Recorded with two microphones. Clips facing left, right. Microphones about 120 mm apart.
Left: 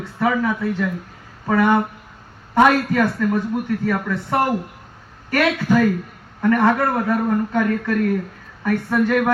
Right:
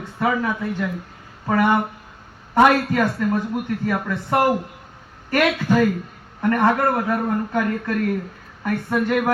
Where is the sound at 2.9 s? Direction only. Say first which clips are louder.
Left 2 dB; 15° right (ahead or behind).